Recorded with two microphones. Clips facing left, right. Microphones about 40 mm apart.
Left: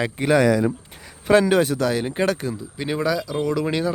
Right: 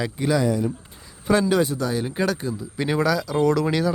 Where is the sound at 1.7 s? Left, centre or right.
Left.